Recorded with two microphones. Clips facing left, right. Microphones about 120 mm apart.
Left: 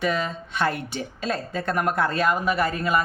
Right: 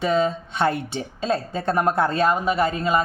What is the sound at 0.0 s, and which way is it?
A woman's voice, 25° right (ahead or behind).